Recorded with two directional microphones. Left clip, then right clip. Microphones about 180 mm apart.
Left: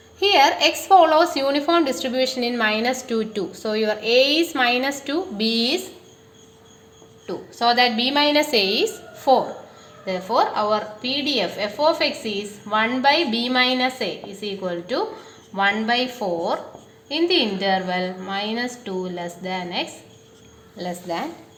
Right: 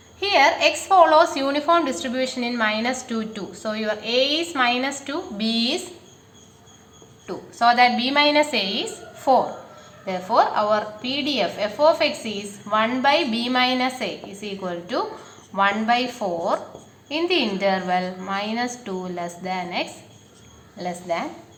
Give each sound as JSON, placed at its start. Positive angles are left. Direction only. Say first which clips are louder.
{"t": 0.2, "sound": "a woman's voice", "louder": "left 1 dB", "side_deg": 50}
{"t": 7.3, "sound": "a woman's voice", "louder": "right 2 dB", "side_deg": 40}
{"t": 10.1, "sound": "a woman's voice", "louder": "right 1 dB", "side_deg": 35}